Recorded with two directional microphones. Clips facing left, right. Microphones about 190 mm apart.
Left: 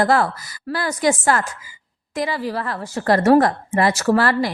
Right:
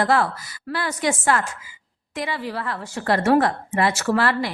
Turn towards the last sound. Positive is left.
turn(degrees=40)  # may be behind; listen again after turning